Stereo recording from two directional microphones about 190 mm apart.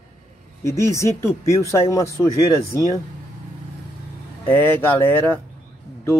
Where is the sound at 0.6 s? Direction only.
15° left (ahead or behind).